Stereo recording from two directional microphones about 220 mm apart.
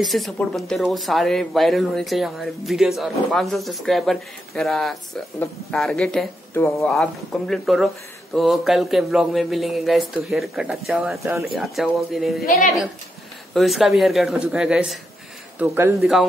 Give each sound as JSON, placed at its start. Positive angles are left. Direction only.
{"t": 0.0, "sound": "speech", "side_deg": 0}
{"t": 12.4, "sound": "a woman's voice", "side_deg": 40}
{"t": 13.6, "sound": "speech", "side_deg": 0}